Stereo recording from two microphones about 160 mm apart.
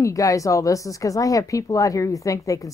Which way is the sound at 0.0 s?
20° left (ahead or behind).